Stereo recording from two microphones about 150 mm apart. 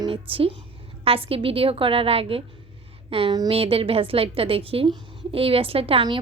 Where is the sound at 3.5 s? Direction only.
40° right (ahead or behind).